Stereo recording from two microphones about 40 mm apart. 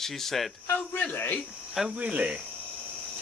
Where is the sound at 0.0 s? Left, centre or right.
Centre.